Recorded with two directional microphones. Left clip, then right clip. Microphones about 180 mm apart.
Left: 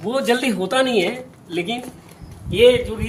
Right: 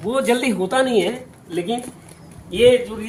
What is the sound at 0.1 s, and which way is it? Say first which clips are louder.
Speech: even; 10° left (ahead or behind).